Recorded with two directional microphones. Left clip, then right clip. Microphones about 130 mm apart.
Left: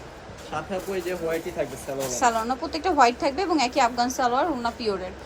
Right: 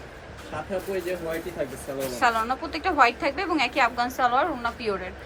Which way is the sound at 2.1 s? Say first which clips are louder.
Even; 25° left (ahead or behind).